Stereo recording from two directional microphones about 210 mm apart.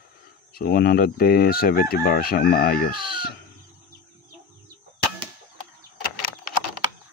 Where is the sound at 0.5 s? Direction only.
45° left (ahead or behind).